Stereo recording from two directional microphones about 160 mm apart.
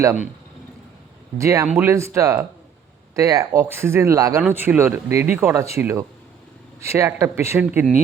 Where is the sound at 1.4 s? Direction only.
20° right (ahead or behind).